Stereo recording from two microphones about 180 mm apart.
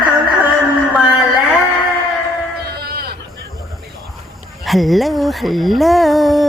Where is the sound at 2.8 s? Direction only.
60° right (ahead or behind).